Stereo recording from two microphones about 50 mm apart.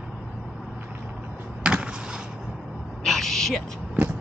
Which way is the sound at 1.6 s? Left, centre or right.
Centre.